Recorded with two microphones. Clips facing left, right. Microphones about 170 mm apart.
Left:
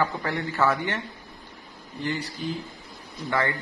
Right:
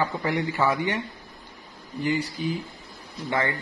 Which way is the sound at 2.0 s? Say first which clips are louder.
Right 4 dB; 10° right (ahead or behind).